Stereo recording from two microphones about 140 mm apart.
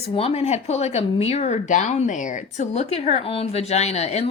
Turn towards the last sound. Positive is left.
turn(degrees=50)  # may be behind; listen again after turning